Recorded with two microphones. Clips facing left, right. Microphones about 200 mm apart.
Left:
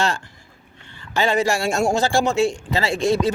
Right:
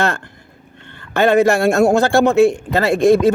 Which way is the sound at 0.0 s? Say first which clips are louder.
Right 4 dB; 55° right (ahead or behind).